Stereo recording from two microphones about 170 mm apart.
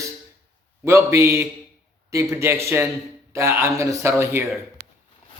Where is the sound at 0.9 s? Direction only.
15° right (ahead or behind).